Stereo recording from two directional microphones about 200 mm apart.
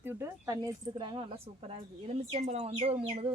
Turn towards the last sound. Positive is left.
turn(degrees=-30)  # may be behind; listen again after turning